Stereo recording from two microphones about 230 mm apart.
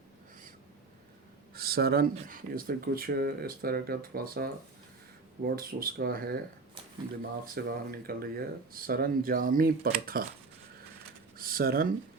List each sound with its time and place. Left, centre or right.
1.5 s speech: right
7.4 s speech: right
11.3 s a sound: right